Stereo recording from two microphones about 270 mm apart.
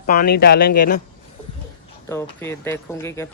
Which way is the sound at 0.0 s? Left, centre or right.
Left.